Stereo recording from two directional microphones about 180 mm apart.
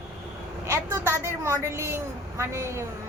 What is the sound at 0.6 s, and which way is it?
A woman's voice, 15° right (ahead or behind).